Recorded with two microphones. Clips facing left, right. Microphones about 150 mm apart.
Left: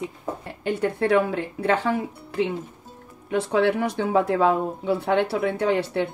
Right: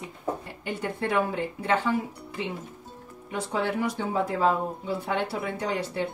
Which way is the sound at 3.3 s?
75° left (ahead or behind).